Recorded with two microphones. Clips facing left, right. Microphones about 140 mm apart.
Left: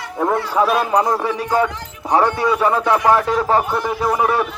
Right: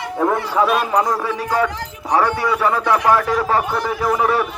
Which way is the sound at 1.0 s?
25° left (ahead or behind).